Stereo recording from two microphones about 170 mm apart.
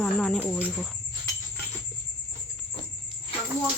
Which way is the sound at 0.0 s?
5° left (ahead or behind).